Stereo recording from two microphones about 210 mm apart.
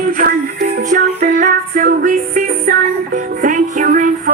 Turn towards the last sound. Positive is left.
turn(degrees=-40)  # may be behind; listen again after turning